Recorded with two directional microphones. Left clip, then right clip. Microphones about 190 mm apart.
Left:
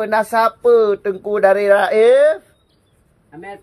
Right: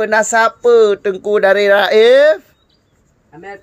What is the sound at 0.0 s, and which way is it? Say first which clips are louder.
Speech: right 3 dB; 20° right (ahead or behind).